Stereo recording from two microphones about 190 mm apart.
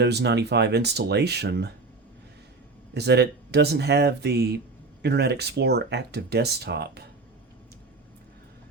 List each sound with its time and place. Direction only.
0.0 s speech: 60° right (ahead or behind)
2.9 s speech: 60° right (ahead or behind)